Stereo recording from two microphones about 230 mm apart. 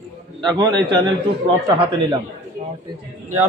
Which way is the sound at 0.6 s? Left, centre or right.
Centre.